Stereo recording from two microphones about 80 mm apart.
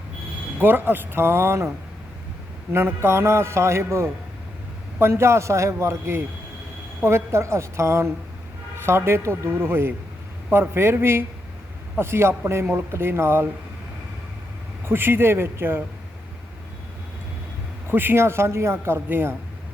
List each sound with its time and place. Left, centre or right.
0.6 s a man's voice: right
2.7 s a man's voice: right
14.8 s speech: right
17.8 s speech: right